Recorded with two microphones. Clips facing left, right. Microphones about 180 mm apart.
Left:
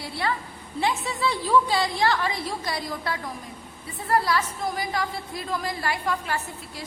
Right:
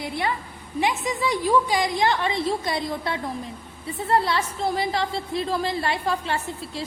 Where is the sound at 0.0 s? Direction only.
20° right (ahead or behind).